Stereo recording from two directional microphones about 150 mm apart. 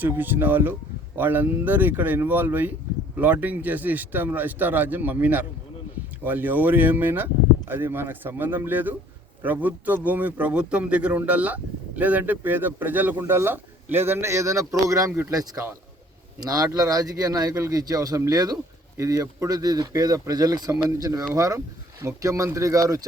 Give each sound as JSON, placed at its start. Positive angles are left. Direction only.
{"t": 0.0, "sound": "a man's voice", "side_deg": -15}